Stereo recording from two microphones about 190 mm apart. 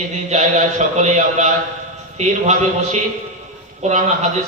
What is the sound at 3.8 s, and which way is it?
Speech, 35° right (ahead or behind).